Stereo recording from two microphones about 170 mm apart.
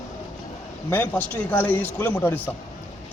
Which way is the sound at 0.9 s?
10° left (ahead or behind).